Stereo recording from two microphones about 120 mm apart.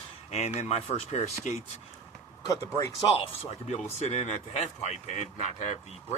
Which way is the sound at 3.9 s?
65° left (ahead or behind).